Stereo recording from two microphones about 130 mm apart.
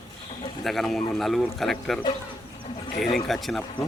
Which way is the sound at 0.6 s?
Centre (ahead or behind).